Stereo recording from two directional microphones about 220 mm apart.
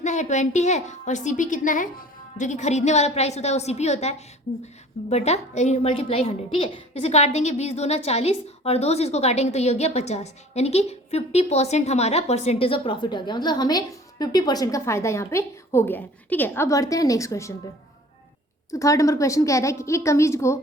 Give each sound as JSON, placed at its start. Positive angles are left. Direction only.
{"t": 0.0, "sound": "a woman's voice", "side_deg": 30}
{"t": 18.7, "sound": "a woman's voice", "side_deg": 15}